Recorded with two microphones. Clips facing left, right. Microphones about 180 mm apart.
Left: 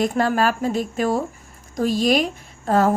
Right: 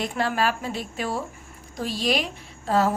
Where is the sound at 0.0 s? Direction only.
45° left (ahead or behind).